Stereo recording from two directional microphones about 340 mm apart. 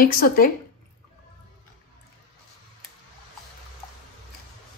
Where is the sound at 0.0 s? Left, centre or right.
Left.